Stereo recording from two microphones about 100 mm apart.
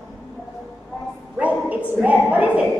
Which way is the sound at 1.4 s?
15° right (ahead or behind).